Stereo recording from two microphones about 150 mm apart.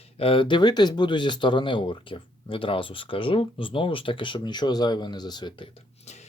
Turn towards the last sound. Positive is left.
turn(degrees=50)  # may be behind; listen again after turning